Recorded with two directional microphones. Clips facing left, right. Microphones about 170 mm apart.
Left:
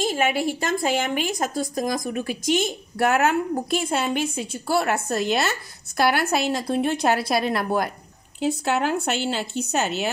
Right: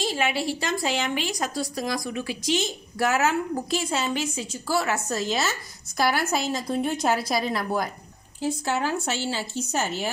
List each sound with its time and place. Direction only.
0.0 s a woman's voice: 50° left (ahead or behind); by 10.0 s 70° left (ahead or behind)